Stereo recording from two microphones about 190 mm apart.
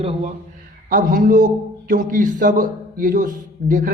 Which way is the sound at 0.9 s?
45° right (ahead or behind).